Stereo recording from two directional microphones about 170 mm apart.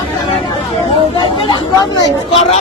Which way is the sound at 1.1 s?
25° left (ahead or behind).